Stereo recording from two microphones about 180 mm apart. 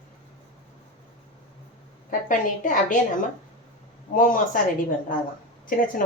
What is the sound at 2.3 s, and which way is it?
Speech, 45° left (ahead or behind).